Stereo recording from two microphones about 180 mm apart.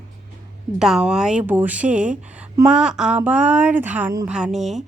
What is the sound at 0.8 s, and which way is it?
A woman's voice, 5° right (ahead or behind).